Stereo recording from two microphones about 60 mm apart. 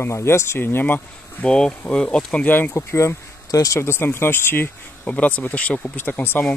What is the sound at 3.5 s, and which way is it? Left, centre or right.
Speech, left.